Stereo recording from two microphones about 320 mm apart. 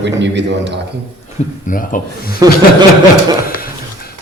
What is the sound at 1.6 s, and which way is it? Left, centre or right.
Speech, left.